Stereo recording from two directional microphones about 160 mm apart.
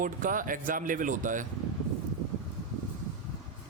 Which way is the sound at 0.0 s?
55° right (ahead or behind).